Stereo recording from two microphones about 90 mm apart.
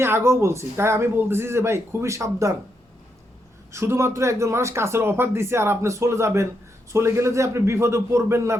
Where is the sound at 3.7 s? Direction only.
30° right (ahead or behind).